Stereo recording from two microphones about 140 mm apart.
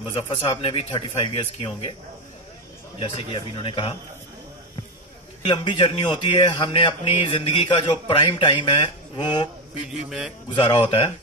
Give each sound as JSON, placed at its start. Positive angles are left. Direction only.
{"t": 0.1, "sound": "speech", "side_deg": 45}
{"t": 3.0, "sound": "speech", "side_deg": 40}
{"t": 5.5, "sound": "speech", "side_deg": 35}
{"t": 10.0, "sound": "a man's voice", "side_deg": -5}
{"t": 10.5, "sound": "speech", "side_deg": 40}